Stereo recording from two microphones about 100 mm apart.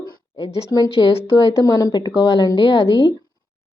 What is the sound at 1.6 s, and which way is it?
Speech, 40° left (ahead or behind).